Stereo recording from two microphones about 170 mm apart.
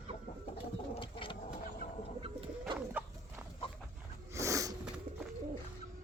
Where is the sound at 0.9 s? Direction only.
30° left (ahead or behind).